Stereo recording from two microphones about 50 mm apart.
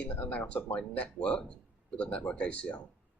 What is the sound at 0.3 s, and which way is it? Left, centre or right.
Speech, left.